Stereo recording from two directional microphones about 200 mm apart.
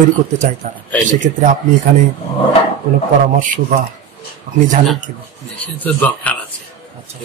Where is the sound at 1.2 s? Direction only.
40° right (ahead or behind).